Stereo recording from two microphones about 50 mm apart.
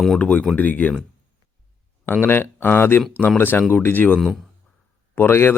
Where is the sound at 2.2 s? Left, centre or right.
Left.